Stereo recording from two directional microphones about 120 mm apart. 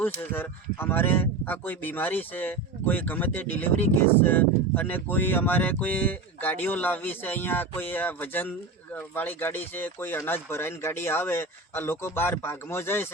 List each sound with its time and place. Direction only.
0.0 s speech: 20° left (ahead or behind)